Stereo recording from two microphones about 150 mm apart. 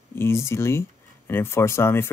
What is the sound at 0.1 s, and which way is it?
Speech, 15° left (ahead or behind).